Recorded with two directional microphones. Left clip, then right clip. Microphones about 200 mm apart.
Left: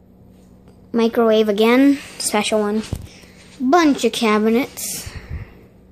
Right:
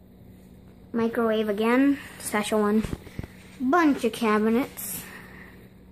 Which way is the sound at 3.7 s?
20° left (ahead or behind).